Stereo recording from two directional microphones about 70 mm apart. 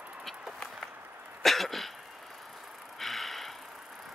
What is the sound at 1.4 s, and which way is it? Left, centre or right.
Cough, centre.